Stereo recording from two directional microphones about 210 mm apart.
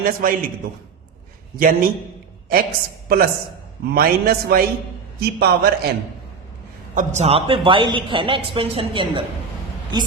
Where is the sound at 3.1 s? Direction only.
45° right (ahead or behind).